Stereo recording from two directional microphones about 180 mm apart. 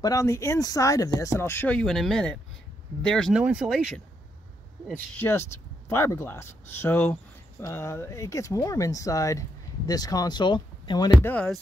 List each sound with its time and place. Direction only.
0.0 s speech: 15° left (ahead or behind)
11.2 s speech: 5° left (ahead or behind)